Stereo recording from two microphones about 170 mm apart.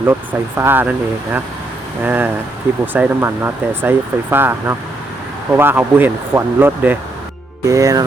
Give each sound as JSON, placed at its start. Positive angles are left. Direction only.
{"t": 0.0, "sound": "speech", "side_deg": -15}